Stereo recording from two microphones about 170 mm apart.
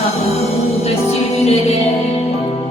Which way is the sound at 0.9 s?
40° left (ahead or behind).